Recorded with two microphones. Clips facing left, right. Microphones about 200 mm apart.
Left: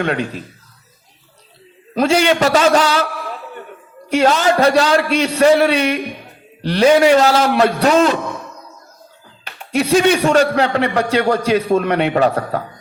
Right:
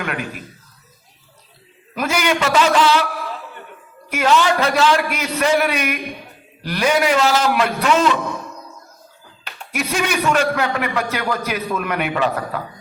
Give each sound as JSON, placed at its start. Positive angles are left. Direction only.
{"t": 0.0, "sound": "a man's voice", "side_deg": 30}
{"t": 2.0, "sound": "a man's voice", "side_deg": 30}
{"t": 4.1, "sound": "a man's voice", "side_deg": 35}
{"t": 9.7, "sound": "a man's voice", "side_deg": 30}